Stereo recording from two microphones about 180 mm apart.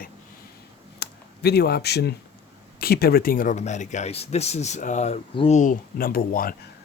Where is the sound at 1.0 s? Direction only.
65° left (ahead or behind).